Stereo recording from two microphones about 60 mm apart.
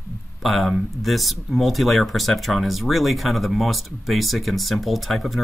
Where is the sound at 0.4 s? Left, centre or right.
Centre.